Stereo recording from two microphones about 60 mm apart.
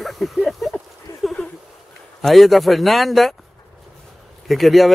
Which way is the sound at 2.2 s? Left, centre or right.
Centre.